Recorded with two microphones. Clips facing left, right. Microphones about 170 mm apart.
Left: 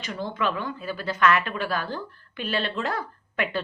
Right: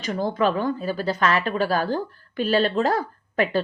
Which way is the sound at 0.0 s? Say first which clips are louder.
Right 6 dB; 40° right (ahead or behind).